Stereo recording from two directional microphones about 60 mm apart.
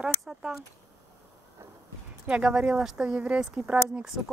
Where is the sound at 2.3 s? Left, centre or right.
Centre.